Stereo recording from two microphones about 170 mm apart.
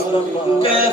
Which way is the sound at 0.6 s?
35° left (ahead or behind).